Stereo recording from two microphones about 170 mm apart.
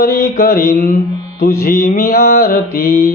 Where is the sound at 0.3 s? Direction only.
55° left (ahead or behind).